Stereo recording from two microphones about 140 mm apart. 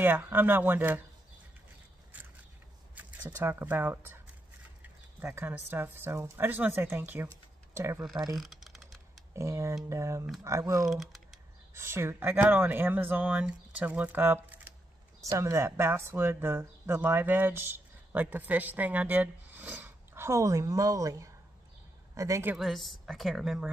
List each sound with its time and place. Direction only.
0.0 s speech: 15° right (ahead or behind)
3.0 s a sound: 10° right (ahead or behind)
3.3 s speech: 15° right (ahead or behind)
5.2 s speech: 15° right (ahead or behind)
8.4 s typing: centre (ahead or behind)
9.3 s speech: 20° right (ahead or behind)
10.9 s speech: centre (ahead or behind)
11.7 s speech: 20° right (ahead or behind)
22.6 s a woman's voice: centre (ahead or behind)